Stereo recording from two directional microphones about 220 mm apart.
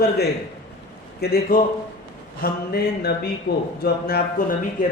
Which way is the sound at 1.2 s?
45° left (ahead or behind).